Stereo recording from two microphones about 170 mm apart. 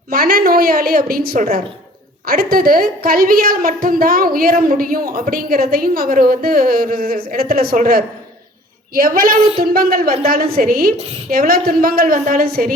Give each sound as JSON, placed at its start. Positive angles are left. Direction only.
{"t": 0.1, "sound": "a woman's voice", "side_deg": -60}